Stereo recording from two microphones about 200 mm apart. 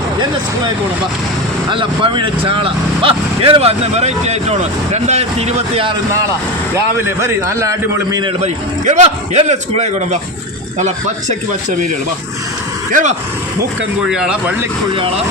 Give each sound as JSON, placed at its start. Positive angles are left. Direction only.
{"t": 1.7, "sound": "speech", "side_deg": -25}
{"t": 6.7, "sound": "a man's voice", "side_deg": -15}
{"t": 8.9, "sound": "a man's voice", "side_deg": -35}
{"t": 12.9, "sound": "a man's voice", "side_deg": -40}
{"t": 14.1, "sound": "speech", "side_deg": -5}